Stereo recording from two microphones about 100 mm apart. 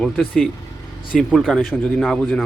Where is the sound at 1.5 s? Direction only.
5° left (ahead or behind).